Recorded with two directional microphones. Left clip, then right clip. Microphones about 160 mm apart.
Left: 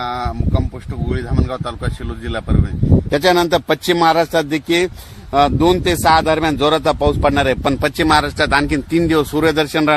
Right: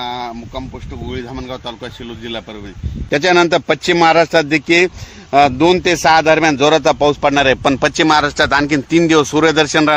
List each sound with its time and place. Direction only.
0.0 s speech: 10° left (ahead or behind)
3.1 s speech: 40° right (ahead or behind); by 9.9 s 20° right (ahead or behind)